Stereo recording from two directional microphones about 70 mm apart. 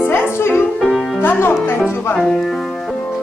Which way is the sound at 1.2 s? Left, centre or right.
Left.